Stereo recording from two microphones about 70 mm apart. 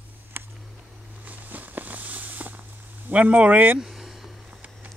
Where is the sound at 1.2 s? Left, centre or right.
Right.